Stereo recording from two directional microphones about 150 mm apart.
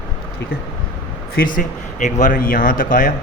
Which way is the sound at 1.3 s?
65° left (ahead or behind).